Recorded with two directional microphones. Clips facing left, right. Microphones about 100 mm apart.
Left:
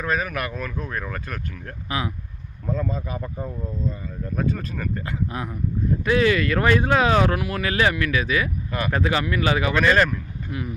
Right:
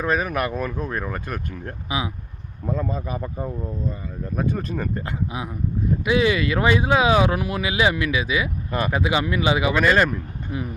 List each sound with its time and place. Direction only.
0.0 s speech: 25° right (ahead or behind)
5.3 s speech: 15° right (ahead or behind)
7.3 s speech: 25° right (ahead or behind)
7.6 s speech: 15° right (ahead or behind)
8.9 s speech: 10° right (ahead or behind)
10.1 s speech: 25° right (ahead or behind)